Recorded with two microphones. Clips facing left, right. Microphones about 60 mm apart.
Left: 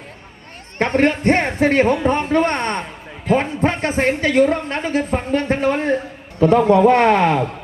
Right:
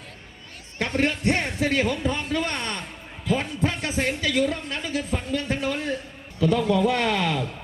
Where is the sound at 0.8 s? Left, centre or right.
Left.